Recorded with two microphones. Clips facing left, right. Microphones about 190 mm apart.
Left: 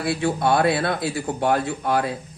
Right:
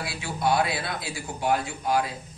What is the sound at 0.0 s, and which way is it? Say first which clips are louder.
A man's voice: left 7 dB; 55° left (ahead or behind).